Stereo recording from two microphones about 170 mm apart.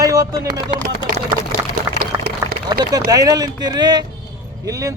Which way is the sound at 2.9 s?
20° right (ahead or behind).